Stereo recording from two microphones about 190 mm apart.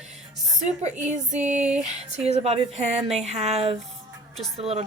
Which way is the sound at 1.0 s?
40° right (ahead or behind).